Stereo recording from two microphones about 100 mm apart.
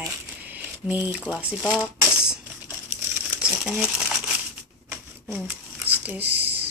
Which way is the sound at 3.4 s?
5° right (ahead or behind).